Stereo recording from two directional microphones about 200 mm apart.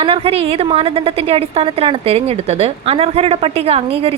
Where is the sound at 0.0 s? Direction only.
30° right (ahead or behind).